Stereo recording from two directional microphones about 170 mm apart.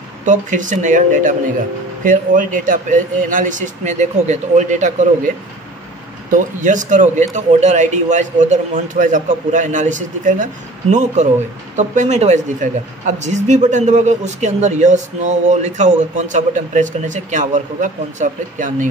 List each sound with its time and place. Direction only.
0.2 s a man's voice: 45° right (ahead or behind)
6.3 s a man's voice: 50° right (ahead or behind)